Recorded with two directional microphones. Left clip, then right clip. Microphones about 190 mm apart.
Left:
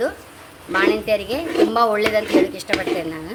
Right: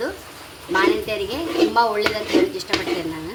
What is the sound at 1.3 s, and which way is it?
A woman's voice, 50° left (ahead or behind).